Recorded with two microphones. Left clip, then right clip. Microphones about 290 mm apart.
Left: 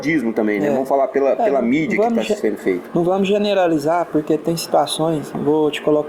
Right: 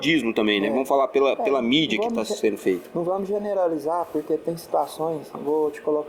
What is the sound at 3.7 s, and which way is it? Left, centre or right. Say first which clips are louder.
Speech: left 7 dB; left.